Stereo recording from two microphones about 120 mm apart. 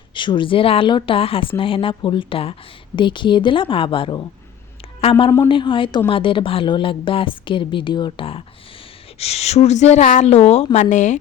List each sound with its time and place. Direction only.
0.1 s a woman's voice: 40° left (ahead or behind)
9.1 s a woman's voice: 60° left (ahead or behind); by 11.2 s 90° left